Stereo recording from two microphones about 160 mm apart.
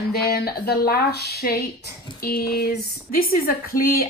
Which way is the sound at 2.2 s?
70° left (ahead or behind).